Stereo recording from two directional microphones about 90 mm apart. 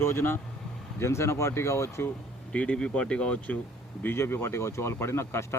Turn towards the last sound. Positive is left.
turn(degrees=30)  # may be behind; listen again after turning